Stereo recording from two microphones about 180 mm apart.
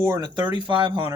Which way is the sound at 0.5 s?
25° right (ahead or behind).